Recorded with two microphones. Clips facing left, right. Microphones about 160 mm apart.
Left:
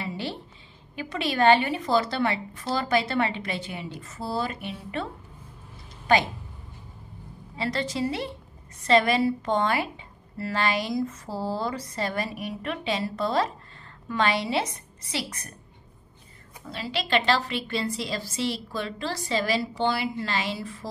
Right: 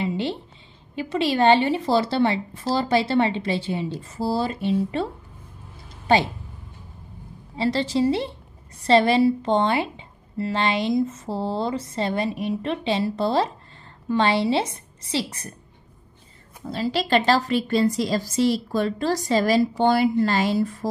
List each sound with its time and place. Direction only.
0.0 s a sound: 25° right (ahead or behind)
0.9 s speech: 25° right (ahead or behind)
6.1 s speech: 30° right (ahead or behind)
7.5 s speech: 30° right (ahead or behind)
16.6 s a woman's voice: 40° right (ahead or behind)